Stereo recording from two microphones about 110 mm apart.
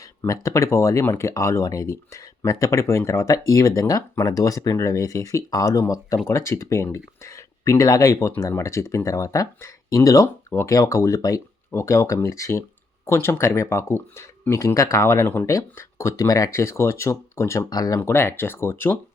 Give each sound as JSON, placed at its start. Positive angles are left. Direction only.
{"t": 0.2, "sound": "speech", "side_deg": 30}
{"t": 18.1, "sound": "speech", "side_deg": 20}